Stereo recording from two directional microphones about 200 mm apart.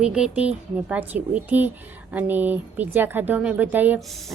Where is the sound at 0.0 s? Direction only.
5° right (ahead or behind).